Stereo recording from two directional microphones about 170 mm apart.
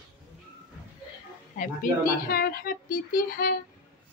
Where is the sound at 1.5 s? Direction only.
55° left (ahead or behind).